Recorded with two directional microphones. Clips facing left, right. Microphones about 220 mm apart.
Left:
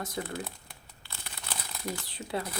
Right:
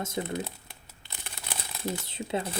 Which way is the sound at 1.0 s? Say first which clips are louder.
Right 1 dB; 20° right (ahead or behind).